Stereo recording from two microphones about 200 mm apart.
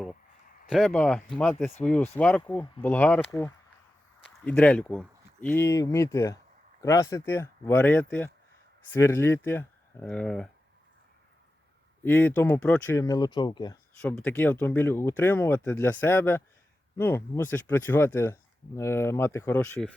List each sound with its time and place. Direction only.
0.7 s speech: 5° left (ahead or behind)
4.4 s speech: 5° left (ahead or behind)
12.0 s speech: 10° left (ahead or behind)
14.0 s speech: 10° left (ahead or behind)